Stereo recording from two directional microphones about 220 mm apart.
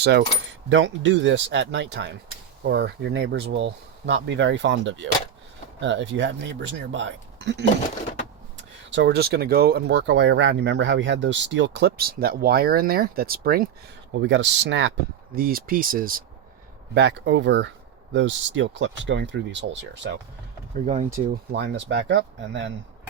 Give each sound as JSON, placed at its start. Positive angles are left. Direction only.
{"t": 0.0, "sound": "speech", "side_deg": -50}
{"t": 8.9, "sound": "speech", "side_deg": -50}
{"t": 14.1, "sound": "speech", "side_deg": -55}
{"t": 15.4, "sound": "speech", "side_deg": -40}
{"t": 16.9, "sound": "speech", "side_deg": -50}
{"t": 21.5, "sound": "speech", "side_deg": -50}